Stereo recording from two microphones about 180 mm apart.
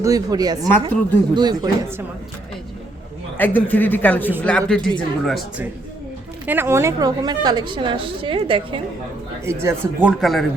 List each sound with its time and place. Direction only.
0.0 s a woman's voice: 20° right (ahead or behind)
3.3 s speech: 10° left (ahead or behind)
6.4 s a woman's voice: 10° right (ahead or behind); by 8.8 s 30° right (ahead or behind)
9.5 s speech: 15° right (ahead or behind)